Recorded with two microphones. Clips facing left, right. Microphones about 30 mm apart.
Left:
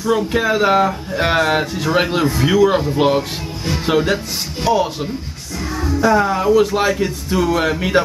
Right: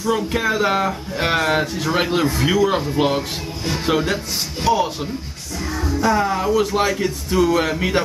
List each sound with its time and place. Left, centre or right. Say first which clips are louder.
0.0 s speech: left 3 dB; centre